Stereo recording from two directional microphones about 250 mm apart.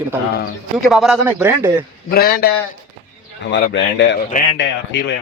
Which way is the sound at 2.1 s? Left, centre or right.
Left.